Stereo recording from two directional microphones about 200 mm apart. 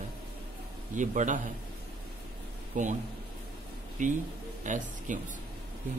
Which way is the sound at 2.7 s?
40° right (ahead or behind).